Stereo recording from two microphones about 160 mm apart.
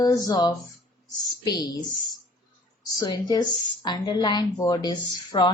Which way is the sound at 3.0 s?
25° left (ahead or behind).